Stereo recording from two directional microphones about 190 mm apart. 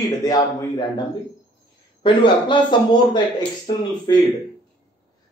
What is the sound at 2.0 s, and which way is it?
A man's voice, 25° left (ahead or behind).